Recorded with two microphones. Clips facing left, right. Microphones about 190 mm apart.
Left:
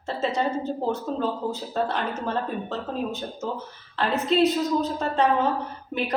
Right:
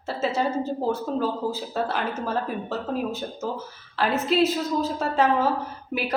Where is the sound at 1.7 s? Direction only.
5° right (ahead or behind).